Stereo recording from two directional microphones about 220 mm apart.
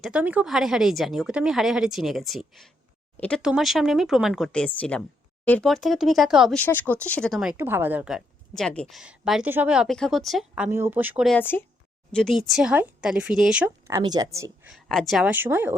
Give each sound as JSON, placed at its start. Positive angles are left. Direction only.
{"t": 0.0, "sound": "speech", "side_deg": -5}
{"t": 11.3, "sound": "a woman's voice", "side_deg": 10}
{"t": 14.7, "sound": "speech", "side_deg": 0}